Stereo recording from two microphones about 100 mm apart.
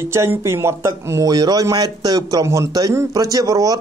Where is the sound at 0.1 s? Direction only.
25° right (ahead or behind).